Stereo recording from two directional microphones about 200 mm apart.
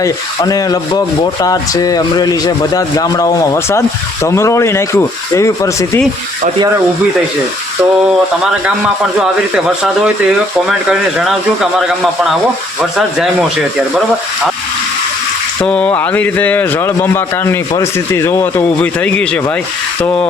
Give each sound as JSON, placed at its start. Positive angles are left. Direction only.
{"t": 0.0, "sound": "speech", "side_deg": 20}
{"t": 9.8, "sound": "speech", "side_deg": -5}
{"t": 15.6, "sound": "speech", "side_deg": 5}